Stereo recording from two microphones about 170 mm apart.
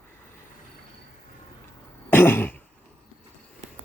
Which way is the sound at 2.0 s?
10° left (ahead or behind).